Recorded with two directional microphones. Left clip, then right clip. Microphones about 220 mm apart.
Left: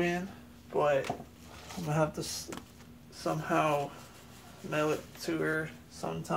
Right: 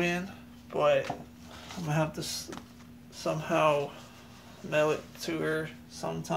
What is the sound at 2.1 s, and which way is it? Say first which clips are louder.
Speech: right 2 dB; 40° right (ahead or behind).